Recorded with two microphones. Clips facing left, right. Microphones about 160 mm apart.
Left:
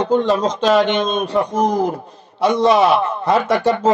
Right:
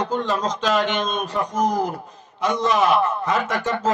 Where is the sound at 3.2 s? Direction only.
30° left (ahead or behind).